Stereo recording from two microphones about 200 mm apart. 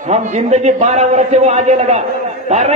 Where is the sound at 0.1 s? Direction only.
35° right (ahead or behind).